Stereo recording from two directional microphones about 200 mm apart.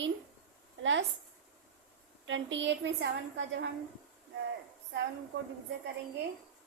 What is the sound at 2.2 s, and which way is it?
A woman's voice, 70° right (ahead or behind).